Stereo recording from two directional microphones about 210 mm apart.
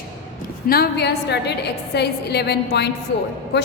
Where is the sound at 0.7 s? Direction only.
50° left (ahead or behind).